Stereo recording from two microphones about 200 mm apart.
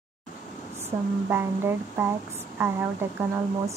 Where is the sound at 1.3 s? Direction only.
10° right (ahead or behind).